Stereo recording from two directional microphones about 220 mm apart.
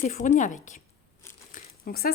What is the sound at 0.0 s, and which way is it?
Speech, 35° left (ahead or behind).